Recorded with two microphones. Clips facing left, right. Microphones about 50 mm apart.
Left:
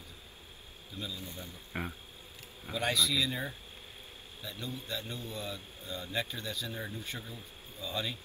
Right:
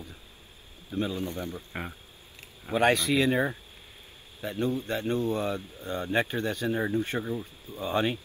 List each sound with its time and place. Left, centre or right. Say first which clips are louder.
0.9 s speech: right 12 dB; right
1.7 s speech: right 2 dB; centre
2.7 s speech: right 8 dB; right